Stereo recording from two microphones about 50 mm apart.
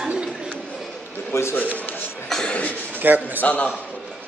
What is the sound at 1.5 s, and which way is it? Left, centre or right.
Speech, left.